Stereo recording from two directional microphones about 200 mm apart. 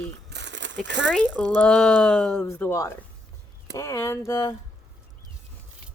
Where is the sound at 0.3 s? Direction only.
60° right (ahead or behind).